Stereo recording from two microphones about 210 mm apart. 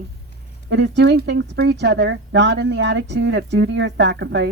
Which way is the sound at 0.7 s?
55° right (ahead or behind).